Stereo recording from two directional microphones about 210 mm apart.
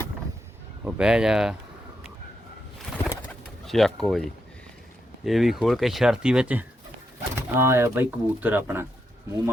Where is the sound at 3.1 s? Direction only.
5° left (ahead or behind).